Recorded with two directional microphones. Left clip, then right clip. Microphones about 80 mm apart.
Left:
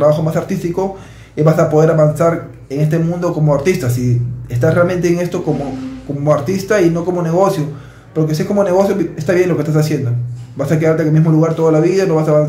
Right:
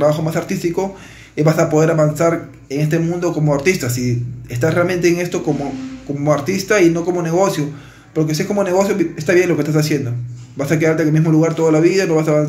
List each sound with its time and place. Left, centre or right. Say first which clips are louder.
0.0 s speech: left 3 dB; left